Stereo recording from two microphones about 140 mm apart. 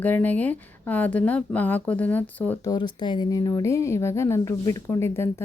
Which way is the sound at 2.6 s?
30° left (ahead or behind).